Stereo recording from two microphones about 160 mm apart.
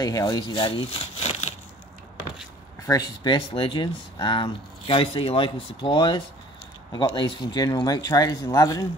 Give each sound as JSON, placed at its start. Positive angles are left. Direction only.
{"t": 0.0, "sound": "speech", "side_deg": 20}
{"t": 2.9, "sound": "speech", "side_deg": 25}